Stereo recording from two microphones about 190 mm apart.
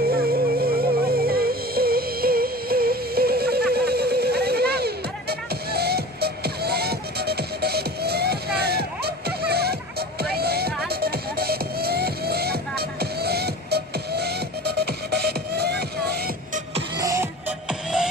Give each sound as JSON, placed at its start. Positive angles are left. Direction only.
{"t": 0.0, "sound": "music", "side_deg": -55}
{"t": 16.9, "sound": "music", "side_deg": -15}